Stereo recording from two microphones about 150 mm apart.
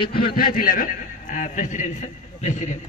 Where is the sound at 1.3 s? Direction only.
55° left (ahead or behind).